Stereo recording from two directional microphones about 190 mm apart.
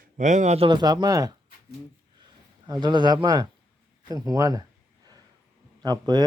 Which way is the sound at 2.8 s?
25° right (ahead or behind).